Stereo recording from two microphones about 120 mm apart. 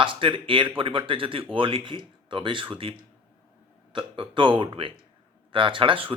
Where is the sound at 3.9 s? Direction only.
45° right (ahead or behind).